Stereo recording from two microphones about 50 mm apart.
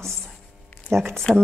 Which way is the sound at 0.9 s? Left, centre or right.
Right.